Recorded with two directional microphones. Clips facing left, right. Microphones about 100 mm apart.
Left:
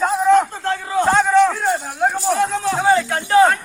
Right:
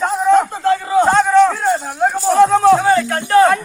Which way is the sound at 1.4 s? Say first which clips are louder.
Right 3 dB; 5° right (ahead or behind).